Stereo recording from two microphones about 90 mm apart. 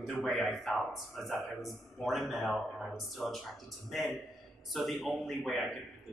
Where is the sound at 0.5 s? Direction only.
Centre (ahead or behind).